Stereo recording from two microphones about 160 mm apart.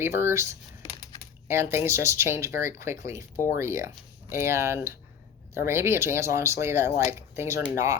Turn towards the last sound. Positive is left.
turn(degrees=-15)  # may be behind; listen again after turning